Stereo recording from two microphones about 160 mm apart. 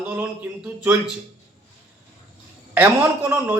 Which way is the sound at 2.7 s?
10° right (ahead or behind).